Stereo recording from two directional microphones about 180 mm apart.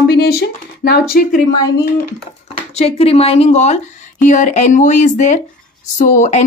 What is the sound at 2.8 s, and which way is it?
A woman's voice, 35° left (ahead or behind).